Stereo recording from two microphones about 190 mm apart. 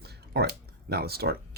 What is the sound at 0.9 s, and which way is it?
Speech, 55° right (ahead or behind).